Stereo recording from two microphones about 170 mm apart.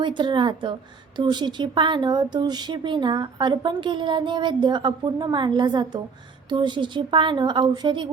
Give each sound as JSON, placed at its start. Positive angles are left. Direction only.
{"t": 0.0, "sound": "a woman's voice", "side_deg": -25}